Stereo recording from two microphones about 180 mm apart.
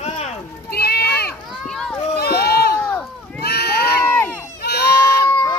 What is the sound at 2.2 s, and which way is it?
Run, 60° left (ahead or behind).